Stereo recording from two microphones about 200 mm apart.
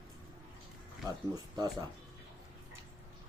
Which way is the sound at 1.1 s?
20° right (ahead or behind).